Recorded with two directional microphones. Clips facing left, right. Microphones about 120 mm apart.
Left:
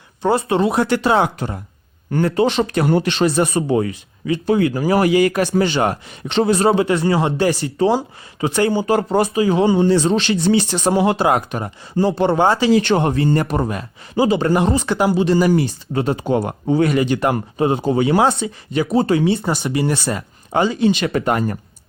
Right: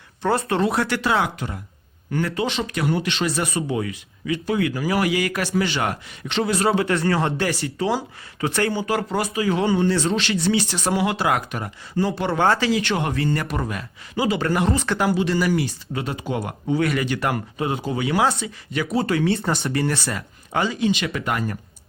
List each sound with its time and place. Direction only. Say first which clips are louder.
0.2 s speech: left 4 dB; 20° left (ahead or behind); by 3.2 s 40° left (ahead or behind)
3.2 s speech: left 7 dB; 30° left (ahead or behind)
8.4 s speech: left 5 dB; 15° left (ahead or behind)
8.7 s speech: left 6 dB; 30° left (ahead or behind)
15.2 s speech: left 6 dB; 30° left (ahead or behind)
19.4 s speech: left 3 dB; centre (ahead or behind)
19.7 s speech: left 5 dB; 15° left (ahead or behind)
20.1 s speech: left 6 dB; 25° left (ahead or behind)